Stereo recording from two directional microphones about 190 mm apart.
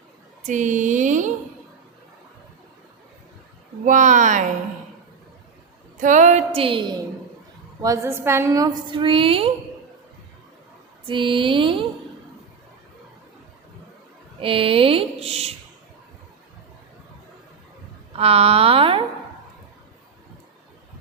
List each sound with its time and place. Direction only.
0.4 s speech: 40° right (ahead or behind)
3.8 s speech: 40° right (ahead or behind)
6.0 s speech: 40° right (ahead or behind)
7.8 s a woman's voice: 15° right (ahead or behind)
11.0 s a woman's voice: 25° right (ahead or behind)
14.4 s a woman's voice: 30° right (ahead or behind)
18.2 s speech: 30° right (ahead or behind)